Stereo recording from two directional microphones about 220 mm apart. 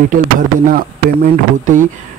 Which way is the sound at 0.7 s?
40° right (ahead or behind).